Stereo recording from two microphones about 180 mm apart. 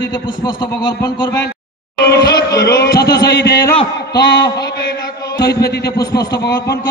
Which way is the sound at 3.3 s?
65° left (ahead or behind).